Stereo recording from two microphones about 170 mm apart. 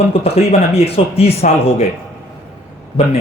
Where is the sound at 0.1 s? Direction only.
35° left (ahead or behind).